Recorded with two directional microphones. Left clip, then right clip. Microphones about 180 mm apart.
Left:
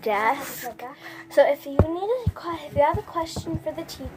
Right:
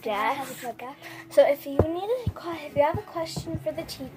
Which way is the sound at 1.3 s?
10° left (ahead or behind).